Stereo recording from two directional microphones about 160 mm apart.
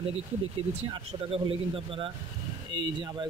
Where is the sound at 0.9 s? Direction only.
35° right (ahead or behind).